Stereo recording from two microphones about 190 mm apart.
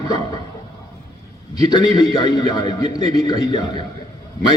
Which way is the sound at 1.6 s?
20° left (ahead or behind).